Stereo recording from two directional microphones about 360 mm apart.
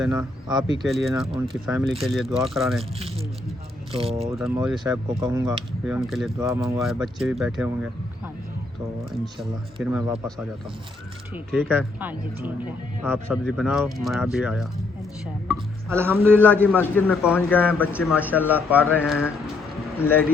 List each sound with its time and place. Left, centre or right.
0.0 s speech: centre
3.9 s speech: centre
4.4 s speech: centre
9.0 s speech: centre
11.5 s speech: centre
16.8 s speech: centre